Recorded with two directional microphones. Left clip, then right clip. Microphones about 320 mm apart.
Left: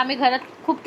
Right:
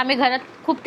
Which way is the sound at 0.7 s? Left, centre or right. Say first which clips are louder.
Right 1 dB; centre.